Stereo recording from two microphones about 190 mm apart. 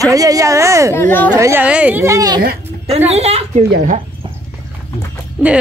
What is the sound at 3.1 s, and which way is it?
Speech, 35° right (ahead or behind).